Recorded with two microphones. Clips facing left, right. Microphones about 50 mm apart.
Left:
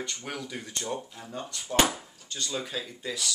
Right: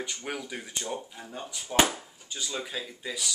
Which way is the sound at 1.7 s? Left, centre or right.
Centre.